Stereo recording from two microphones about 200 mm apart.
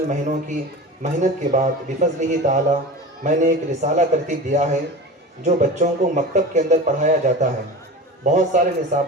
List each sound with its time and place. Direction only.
0.1 s speech: 35° right (ahead or behind)